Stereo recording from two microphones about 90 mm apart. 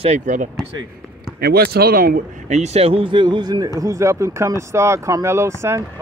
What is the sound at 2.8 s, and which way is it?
Speech, 90° right.